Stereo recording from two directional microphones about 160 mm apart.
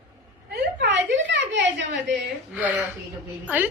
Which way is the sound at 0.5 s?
90° right.